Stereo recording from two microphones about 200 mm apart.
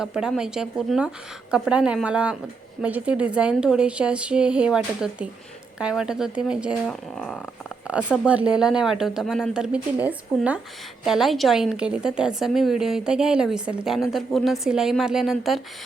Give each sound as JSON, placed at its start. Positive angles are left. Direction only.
{"t": 0.0, "sound": "a woman's voice", "side_deg": -5}